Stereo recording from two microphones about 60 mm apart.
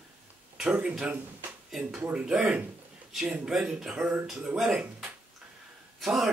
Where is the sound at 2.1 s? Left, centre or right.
Centre.